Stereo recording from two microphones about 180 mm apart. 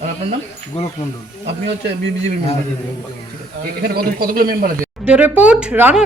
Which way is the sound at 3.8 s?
60° right (ahead or behind).